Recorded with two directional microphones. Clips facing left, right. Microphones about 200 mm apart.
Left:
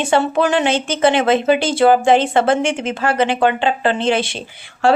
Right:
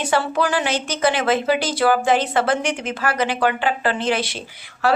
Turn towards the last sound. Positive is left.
turn(degrees=30)  # may be behind; listen again after turning